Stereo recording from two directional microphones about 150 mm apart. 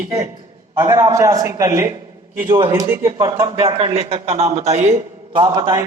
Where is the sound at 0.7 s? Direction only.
20° right (ahead or behind).